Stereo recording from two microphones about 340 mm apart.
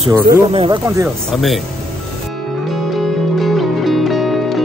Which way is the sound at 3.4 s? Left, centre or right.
Centre.